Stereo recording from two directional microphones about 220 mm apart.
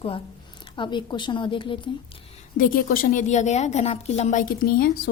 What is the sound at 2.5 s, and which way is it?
A woman's voice, 40° left (ahead or behind).